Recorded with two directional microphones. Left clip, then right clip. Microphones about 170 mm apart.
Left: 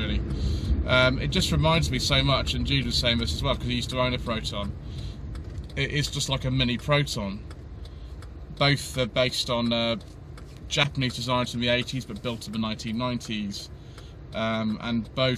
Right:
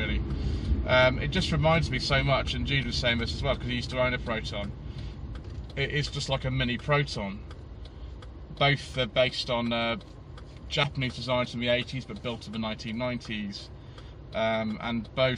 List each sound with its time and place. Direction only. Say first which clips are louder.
0.8 s speech: left 1 dB; 15° left (ahead or behind)
5.8 s speech: left 2 dB; 15° left (ahead or behind)
8.5 s speech: left 1 dB; 15° left (ahead or behind)